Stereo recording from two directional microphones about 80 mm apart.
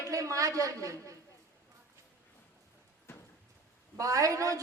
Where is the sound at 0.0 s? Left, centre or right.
Right.